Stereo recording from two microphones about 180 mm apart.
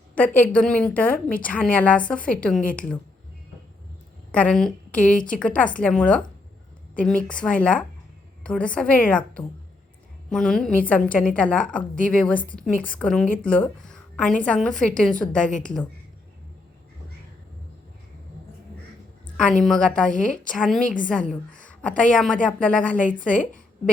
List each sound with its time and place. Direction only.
0.1 s a woman's voice: 10° left (ahead or behind)
4.3 s a woman's voice: 5° left (ahead or behind)
15.4 s a woman's voice: 45° left (ahead or behind)
19.4 s a woman's voice: 5° left (ahead or behind)